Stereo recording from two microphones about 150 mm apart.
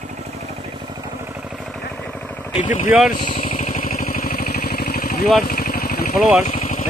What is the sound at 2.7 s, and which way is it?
Speech, 55° left (ahead or behind).